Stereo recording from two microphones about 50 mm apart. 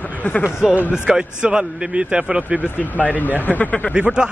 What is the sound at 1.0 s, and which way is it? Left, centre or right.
A man's voice, centre.